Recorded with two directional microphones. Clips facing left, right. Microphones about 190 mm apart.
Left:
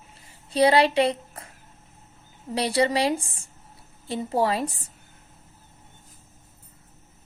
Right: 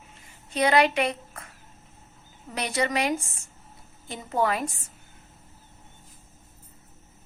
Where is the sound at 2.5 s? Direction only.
30° left (ahead or behind).